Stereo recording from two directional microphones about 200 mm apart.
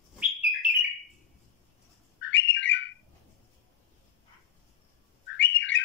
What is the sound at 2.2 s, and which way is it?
Bird, 65° left (ahead or behind).